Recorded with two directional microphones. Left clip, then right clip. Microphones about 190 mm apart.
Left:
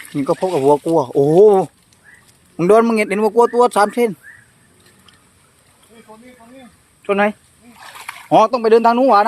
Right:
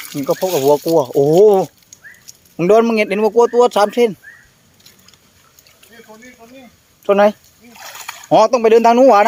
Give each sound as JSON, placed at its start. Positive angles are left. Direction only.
{"t": 0.3, "sound": "a man's voice", "side_deg": 10}
{"t": 6.1, "sound": "speech", "side_deg": -25}
{"t": 7.9, "sound": "a sound", "side_deg": 5}
{"t": 8.4, "sound": "speech", "side_deg": -30}